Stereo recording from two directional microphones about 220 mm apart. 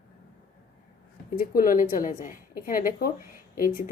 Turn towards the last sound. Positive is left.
turn(degrees=40)  # may be behind; listen again after turning